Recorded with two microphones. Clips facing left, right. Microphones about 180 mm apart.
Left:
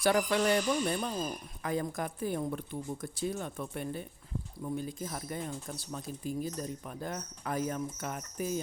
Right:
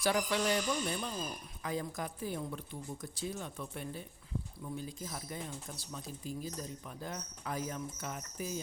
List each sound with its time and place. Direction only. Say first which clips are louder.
0.0 s speech: left 4 dB; 55° left (ahead or behind)